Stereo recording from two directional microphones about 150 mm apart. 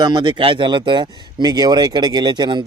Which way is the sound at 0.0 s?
30° right (ahead or behind).